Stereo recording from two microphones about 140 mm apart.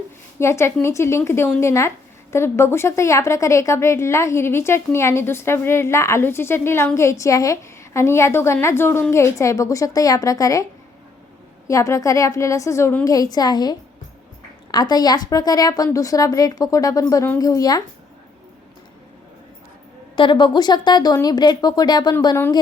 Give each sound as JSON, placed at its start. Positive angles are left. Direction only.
{"t": 0.3, "sound": "a woman's voice", "side_deg": 20}
{"t": 11.7, "sound": "a woman's voice", "side_deg": 20}
{"t": 13.1, "sound": "a woman's voice", "side_deg": 25}
{"t": 20.1, "sound": "speech", "side_deg": 35}